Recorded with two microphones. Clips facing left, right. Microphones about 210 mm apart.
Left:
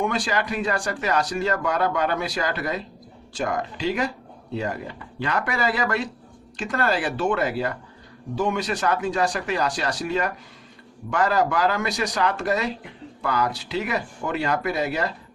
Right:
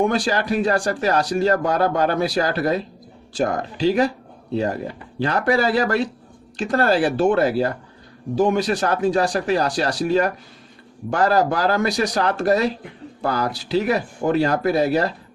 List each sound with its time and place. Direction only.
0.0 s speech: 35° right (ahead or behind)